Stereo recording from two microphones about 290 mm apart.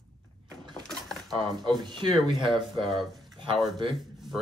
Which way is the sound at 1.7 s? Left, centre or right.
Centre.